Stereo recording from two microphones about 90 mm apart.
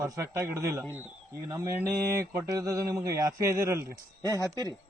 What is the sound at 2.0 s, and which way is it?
Mantra, 30° right (ahead or behind).